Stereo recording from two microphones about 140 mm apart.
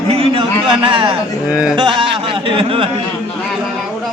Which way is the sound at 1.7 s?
35° right (ahead or behind).